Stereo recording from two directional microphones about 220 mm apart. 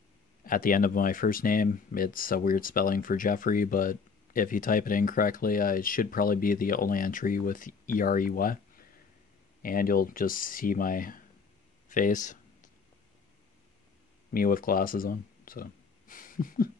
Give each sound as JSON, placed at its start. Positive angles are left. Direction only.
{"t": 0.4, "sound": "speech", "side_deg": 40}
{"t": 9.6, "sound": "speech", "side_deg": 40}
{"t": 11.9, "sound": "a sound", "side_deg": 35}
{"t": 14.3, "sound": "speech", "side_deg": 40}